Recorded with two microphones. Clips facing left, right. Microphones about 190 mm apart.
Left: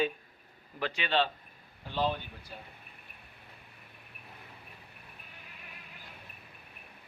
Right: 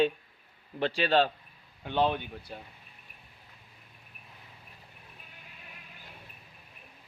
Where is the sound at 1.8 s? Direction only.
65° right (ahead or behind).